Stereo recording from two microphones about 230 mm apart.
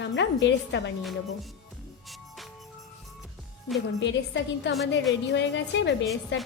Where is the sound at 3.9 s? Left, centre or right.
Left.